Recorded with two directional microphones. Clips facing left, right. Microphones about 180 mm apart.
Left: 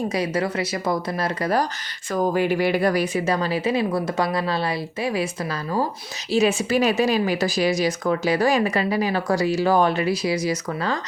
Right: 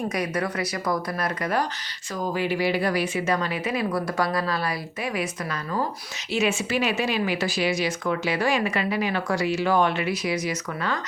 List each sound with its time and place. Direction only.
0.1 s speech: 25° left (ahead or behind)
2.1 s speech: 50° left (ahead or behind); by 5.3 s 30° left (ahead or behind)
6.3 s speech: 35° left (ahead or behind)